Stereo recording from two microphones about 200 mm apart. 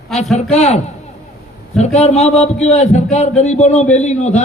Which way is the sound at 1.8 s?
30° left (ahead or behind).